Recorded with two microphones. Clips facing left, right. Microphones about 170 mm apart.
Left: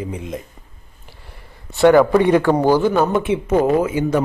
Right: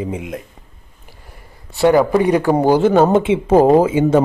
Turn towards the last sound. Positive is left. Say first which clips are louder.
# right 5 dB
turn(degrees=-25)  # may be behind; listen again after turning